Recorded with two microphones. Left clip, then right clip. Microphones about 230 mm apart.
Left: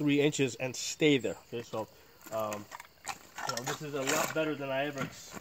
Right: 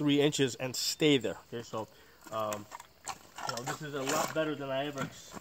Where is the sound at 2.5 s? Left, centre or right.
Centre.